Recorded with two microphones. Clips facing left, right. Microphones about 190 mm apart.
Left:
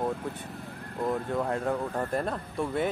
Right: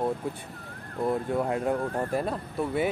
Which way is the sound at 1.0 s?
10° right (ahead or behind).